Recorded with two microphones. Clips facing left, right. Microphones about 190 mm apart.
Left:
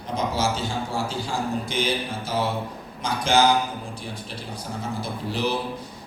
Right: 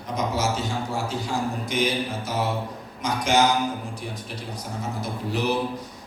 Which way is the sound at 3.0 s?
30° left (ahead or behind).